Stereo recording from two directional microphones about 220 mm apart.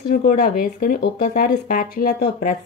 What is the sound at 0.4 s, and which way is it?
A woman's voice, 40° left (ahead or behind).